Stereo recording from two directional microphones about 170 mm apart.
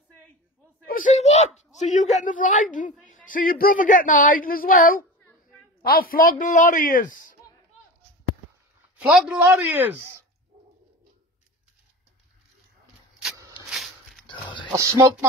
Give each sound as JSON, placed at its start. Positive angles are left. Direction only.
{"t": 0.8, "sound": "a sound", "side_deg": 50}
{"t": 2.1, "sound": "a man's voice", "side_deg": 50}
{"t": 8.9, "sound": "speech", "side_deg": -5}
{"t": 13.7, "sound": "walk", "side_deg": 0}
{"t": 14.2, "sound": "dog", "side_deg": 30}
{"t": 14.7, "sound": "speech", "side_deg": -15}